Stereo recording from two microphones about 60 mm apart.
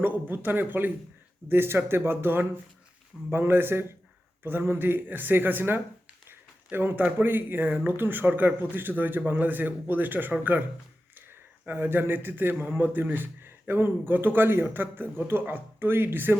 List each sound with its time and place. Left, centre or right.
0.0 s a man's voice: right
11.6 s a man's voice: right